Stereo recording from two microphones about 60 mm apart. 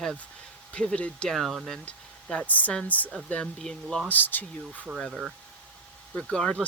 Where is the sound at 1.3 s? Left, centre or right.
Centre.